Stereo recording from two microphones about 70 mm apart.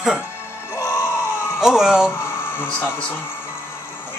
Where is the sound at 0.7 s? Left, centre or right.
Left.